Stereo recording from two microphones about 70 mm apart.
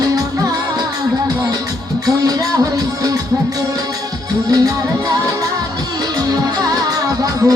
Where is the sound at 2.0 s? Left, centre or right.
Right.